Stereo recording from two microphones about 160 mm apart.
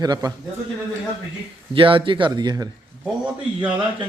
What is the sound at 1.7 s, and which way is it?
Speech, 35° right (ahead or behind).